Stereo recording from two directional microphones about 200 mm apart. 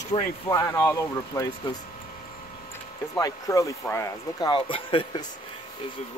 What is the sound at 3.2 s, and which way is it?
Speech, 15° left (ahead or behind).